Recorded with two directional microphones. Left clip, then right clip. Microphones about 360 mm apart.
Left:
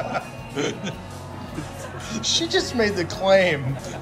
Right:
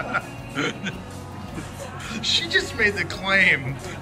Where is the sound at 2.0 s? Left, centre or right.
Centre.